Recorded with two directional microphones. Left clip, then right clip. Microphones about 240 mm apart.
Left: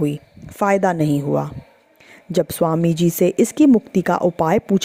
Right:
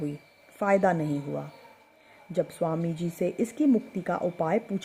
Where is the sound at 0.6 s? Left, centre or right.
Left.